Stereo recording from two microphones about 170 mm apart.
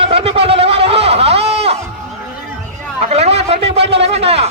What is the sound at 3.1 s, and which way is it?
A man's voice, 35° right (ahead or behind).